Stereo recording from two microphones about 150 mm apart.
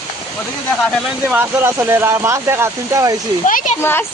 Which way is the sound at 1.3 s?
10° right (ahead or behind).